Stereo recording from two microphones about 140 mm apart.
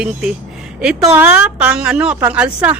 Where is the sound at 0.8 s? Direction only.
5° right (ahead or behind).